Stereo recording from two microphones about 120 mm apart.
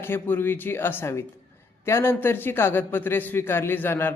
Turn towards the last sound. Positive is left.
turn(degrees=20)  # may be behind; listen again after turning